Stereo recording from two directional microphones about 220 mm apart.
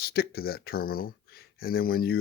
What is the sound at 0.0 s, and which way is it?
Speech, 45° left (ahead or behind).